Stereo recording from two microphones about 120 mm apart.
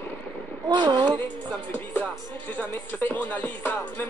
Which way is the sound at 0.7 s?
40° right (ahead or behind).